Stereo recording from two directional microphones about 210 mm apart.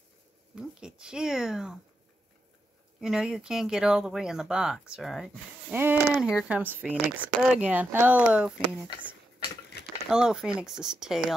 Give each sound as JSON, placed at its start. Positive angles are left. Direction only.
{"t": 0.6, "sound": "speech", "side_deg": -5}
{"t": 3.0, "sound": "speech", "side_deg": -5}
{"t": 9.4, "sound": "a sound", "side_deg": 55}
{"t": 10.0, "sound": "speech", "side_deg": -5}